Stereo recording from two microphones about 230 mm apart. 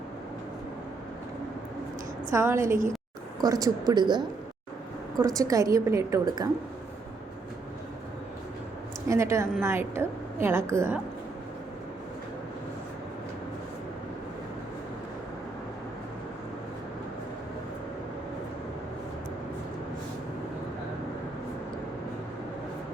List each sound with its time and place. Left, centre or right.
2.3 s a woman's voice: centre
9.0 s a woman's voice: centre